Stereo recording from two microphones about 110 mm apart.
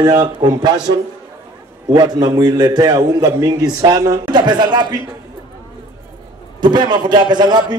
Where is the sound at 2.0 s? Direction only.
40° right (ahead or behind).